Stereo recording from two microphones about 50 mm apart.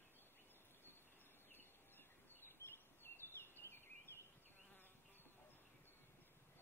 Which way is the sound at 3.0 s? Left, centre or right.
Left.